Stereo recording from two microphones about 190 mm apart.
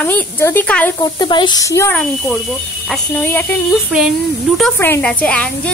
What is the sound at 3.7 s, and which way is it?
Speech, 5° right (ahead or behind).